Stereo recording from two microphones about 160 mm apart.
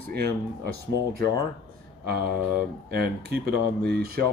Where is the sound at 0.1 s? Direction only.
90° right.